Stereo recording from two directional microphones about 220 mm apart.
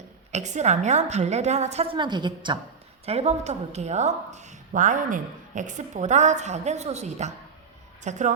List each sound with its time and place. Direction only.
0.3 s a woman's voice: 30° right (ahead or behind)